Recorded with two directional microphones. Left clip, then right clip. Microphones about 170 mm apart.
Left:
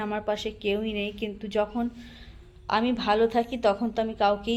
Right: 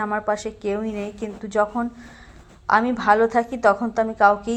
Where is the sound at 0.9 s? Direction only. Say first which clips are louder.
Right 2 dB; 40° right (ahead or behind).